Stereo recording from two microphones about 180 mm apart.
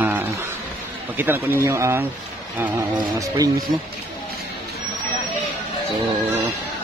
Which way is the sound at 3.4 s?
20° right (ahead or behind).